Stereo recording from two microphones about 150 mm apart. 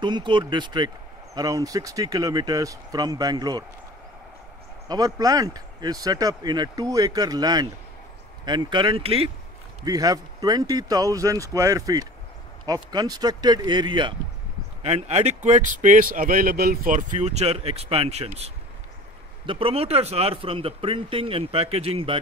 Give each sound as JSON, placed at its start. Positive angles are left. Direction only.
{"t": 0.0, "sound": "speech", "side_deg": -30}
{"t": 4.8, "sound": "speech", "side_deg": -25}
{"t": 9.8, "sound": "speech", "side_deg": -25}
{"t": 14.8, "sound": "speech", "side_deg": -45}